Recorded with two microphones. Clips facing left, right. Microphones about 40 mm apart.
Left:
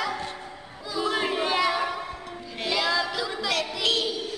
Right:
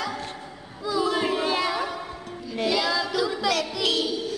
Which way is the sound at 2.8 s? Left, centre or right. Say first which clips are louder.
Even; centre.